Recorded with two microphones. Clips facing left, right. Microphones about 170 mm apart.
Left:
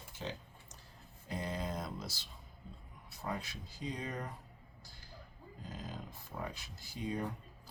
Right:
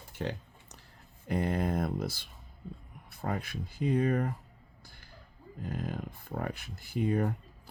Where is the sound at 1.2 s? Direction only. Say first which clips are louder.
Right 9 dB; 60° right (ahead or behind).